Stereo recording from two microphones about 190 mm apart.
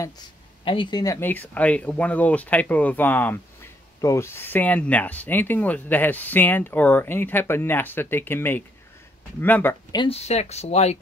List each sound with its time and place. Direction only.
0.7 s speech: 25° left (ahead or behind)
9.9 s speech: 30° left (ahead or behind)